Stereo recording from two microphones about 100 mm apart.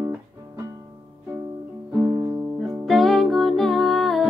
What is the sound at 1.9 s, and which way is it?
Music, 15° right (ahead or behind).